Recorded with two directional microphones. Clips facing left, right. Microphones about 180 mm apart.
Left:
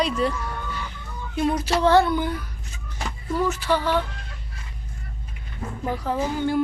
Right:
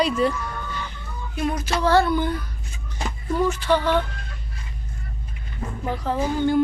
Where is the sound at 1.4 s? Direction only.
30° left (ahead or behind).